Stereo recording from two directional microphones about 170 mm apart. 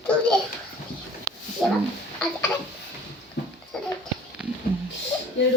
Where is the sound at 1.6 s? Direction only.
Centre (ahead or behind).